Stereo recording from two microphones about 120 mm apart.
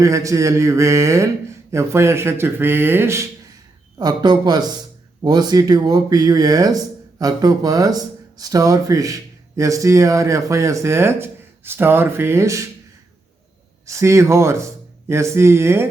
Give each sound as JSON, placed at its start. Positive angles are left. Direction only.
{"t": 0.0, "sound": "speech", "side_deg": -25}
{"t": 3.9, "sound": "speech", "side_deg": -35}
{"t": 13.8, "sound": "speech", "side_deg": -25}